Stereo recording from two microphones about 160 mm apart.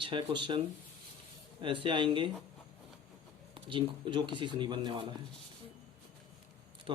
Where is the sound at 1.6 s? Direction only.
35° right (ahead or behind).